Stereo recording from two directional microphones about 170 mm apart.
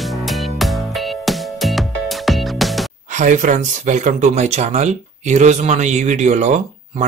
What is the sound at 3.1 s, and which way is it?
Speech, 45° right (ahead or behind).